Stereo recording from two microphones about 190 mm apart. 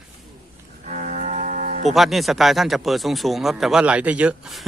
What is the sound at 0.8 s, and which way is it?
Music, 40° right (ahead or behind).